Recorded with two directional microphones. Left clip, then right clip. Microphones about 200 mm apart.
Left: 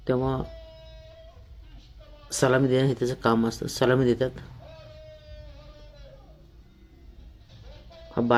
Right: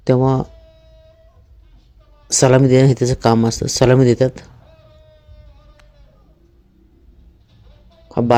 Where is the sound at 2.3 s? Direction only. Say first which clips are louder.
Right 10 dB; 35° right (ahead or behind).